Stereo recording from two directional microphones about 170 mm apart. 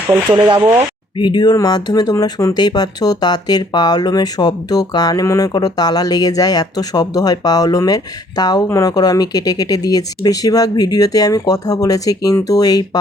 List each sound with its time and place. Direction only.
0.3 s speech: 30° right (ahead or behind)
1.2 s speech: 25° left (ahead or behind)